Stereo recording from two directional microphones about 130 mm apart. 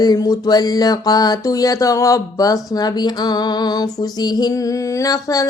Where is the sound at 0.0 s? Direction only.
30° left (ahead or behind).